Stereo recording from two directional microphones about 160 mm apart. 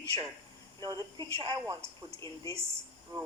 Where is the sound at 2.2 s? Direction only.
20° left (ahead or behind).